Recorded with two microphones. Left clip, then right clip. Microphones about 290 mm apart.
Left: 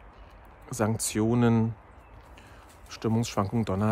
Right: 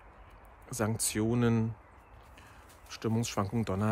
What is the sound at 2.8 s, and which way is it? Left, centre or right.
Speech, centre.